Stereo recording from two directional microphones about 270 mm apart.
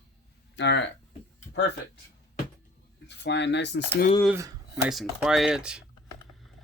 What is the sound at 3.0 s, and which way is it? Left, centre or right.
Speech, left.